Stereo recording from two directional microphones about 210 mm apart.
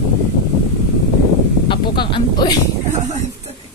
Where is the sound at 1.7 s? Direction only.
20° left (ahead or behind).